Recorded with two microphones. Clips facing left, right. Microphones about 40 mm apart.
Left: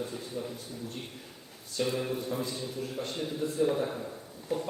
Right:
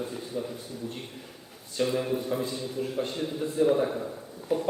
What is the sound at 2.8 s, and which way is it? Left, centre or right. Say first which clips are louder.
Speech: right 8 dB; right.